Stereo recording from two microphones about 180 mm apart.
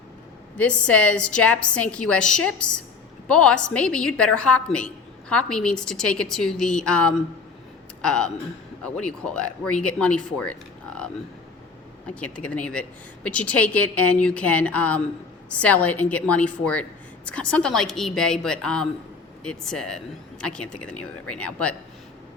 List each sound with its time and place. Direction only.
0.5 s a woman's voice: 5° left (ahead or behind)